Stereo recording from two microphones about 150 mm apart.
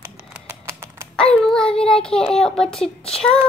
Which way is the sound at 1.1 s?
5° left (ahead or behind).